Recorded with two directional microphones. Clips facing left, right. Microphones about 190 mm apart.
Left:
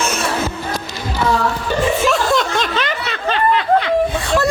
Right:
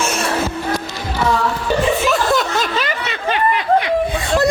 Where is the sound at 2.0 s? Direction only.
Centre (ahead or behind).